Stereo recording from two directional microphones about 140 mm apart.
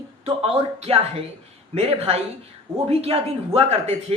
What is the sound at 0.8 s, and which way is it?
Speech, 50° right (ahead or behind).